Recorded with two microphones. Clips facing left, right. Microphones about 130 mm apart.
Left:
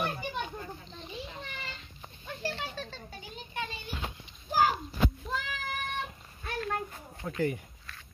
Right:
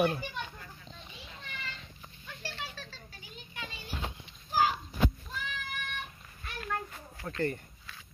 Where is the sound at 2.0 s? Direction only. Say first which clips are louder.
Left 9 dB; 30° left (ahead or behind).